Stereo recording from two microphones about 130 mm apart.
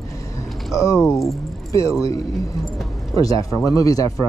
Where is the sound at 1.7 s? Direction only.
25° left (ahead or behind).